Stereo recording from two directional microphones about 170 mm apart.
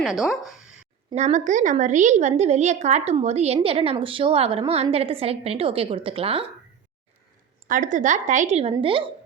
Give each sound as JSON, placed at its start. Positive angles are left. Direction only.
{"t": 0.0, "sound": "speech", "side_deg": 0}
{"t": 1.1, "sound": "a woman's voice", "side_deg": -45}
{"t": 7.7, "sound": "a woman's voice", "side_deg": -50}